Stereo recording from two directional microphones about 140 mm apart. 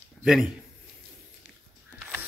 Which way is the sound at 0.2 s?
5° right (ahead or behind).